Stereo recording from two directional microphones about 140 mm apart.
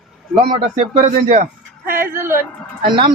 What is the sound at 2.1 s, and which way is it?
Speech, 15° right (ahead or behind).